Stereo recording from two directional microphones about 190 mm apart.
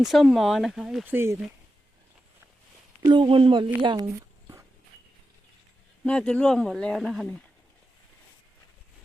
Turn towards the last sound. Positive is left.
turn(degrees=5)  # may be behind; listen again after turning